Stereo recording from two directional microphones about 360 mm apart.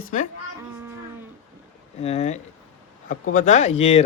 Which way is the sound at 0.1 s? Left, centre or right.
Centre.